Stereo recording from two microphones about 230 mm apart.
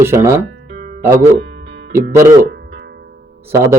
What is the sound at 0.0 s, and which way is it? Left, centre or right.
Speech, centre.